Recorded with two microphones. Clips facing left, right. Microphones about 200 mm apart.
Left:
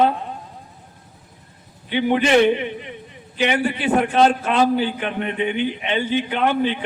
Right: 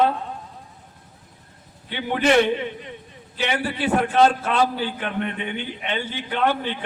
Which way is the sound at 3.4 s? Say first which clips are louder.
Left 4 dB; 15° left (ahead or behind).